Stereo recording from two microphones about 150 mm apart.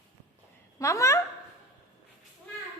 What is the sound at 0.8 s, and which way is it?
Speech, 20° left (ahead or behind).